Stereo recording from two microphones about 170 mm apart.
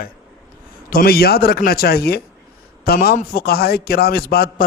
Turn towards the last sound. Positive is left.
turn(degrees=65)  # may be behind; listen again after turning